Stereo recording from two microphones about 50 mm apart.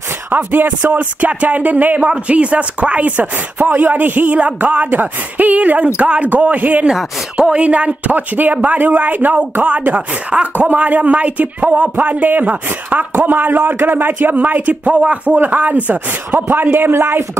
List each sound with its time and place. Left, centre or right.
0.3 s speech: right
6.9 s speech: centre
7.5 s speech: right